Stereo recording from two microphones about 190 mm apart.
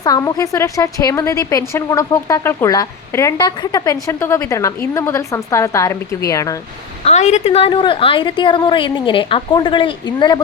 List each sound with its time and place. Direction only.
0.0 s a woman's voice: 20° left (ahead or behind)
7.0 s a woman's voice: 35° left (ahead or behind)